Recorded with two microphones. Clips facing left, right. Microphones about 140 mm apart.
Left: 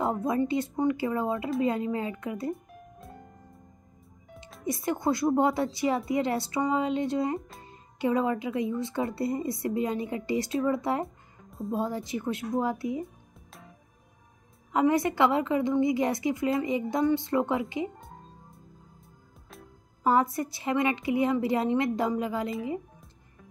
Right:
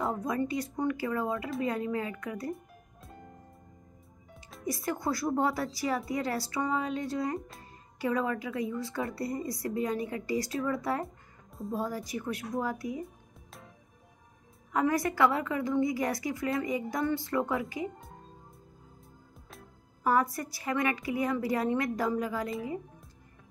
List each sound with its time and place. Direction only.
0.0 s a woman's voice: 25° left (ahead or behind)
4.6 s a woman's voice: 25° left (ahead or behind)
7.3 s speech: centre (ahead or behind)
7.6 s a woman's voice: 25° left (ahead or behind)
13.0 s music: centre (ahead or behind)
14.7 s a woman's voice: 20° left (ahead or behind)
20.0 s a woman's voice: 25° left (ahead or behind)